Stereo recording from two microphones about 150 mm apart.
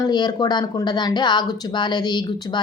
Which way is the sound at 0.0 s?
30° left (ahead or behind).